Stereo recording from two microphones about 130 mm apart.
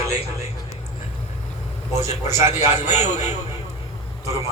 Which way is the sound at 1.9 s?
25° right (ahead or behind).